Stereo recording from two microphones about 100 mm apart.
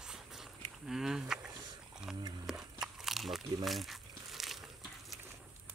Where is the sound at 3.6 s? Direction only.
Centre (ahead or behind).